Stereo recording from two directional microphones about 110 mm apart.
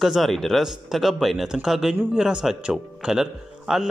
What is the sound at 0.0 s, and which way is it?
Speech, centre (ahead or behind).